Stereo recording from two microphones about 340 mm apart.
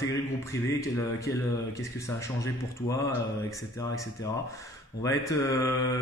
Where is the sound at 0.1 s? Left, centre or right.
Centre.